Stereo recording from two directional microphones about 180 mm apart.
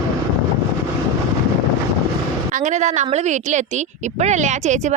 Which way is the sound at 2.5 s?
40° right (ahead or behind).